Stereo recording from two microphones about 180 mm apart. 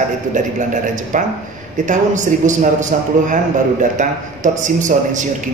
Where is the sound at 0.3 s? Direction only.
45° right (ahead or behind).